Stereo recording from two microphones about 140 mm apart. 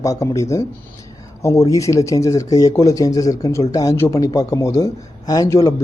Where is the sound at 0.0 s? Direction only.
25° left (ahead or behind).